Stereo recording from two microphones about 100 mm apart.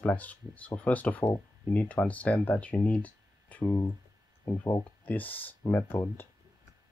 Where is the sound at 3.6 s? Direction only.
25° left (ahead or behind).